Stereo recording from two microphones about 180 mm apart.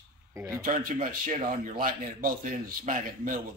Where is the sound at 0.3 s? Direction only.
15° right (ahead or behind).